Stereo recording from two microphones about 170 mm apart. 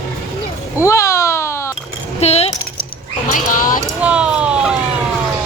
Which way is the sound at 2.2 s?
40° left (ahead or behind).